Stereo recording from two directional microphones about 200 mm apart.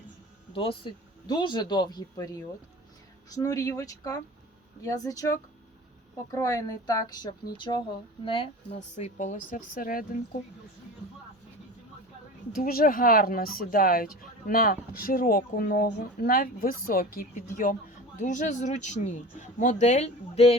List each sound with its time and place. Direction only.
0.5 s speech: 25° left (ahead or behind)
9.0 s speech: 35° left (ahead or behind)
12.6 s speech: 45° left (ahead or behind); by 20.6 s 30° left (ahead or behind)